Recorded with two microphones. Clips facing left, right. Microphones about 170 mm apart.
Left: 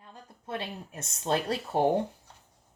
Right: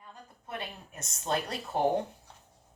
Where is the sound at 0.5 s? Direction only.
30° left (ahead or behind).